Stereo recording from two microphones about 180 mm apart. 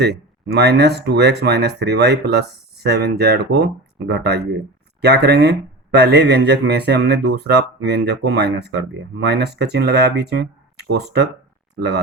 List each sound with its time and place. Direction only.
0.0 s speech: 70° right (ahead or behind)